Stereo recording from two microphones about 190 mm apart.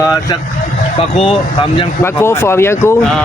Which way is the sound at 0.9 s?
30° left (ahead or behind).